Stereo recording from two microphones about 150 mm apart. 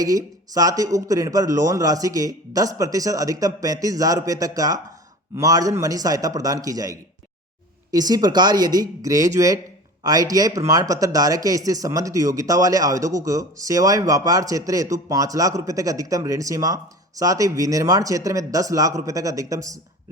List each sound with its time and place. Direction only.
0.0 s speech: 25° right (ahead or behind)